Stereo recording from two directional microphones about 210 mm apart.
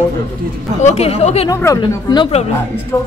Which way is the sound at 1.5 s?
15° left (ahead or behind).